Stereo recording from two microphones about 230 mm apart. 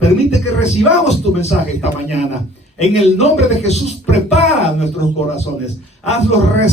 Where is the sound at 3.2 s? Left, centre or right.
Left.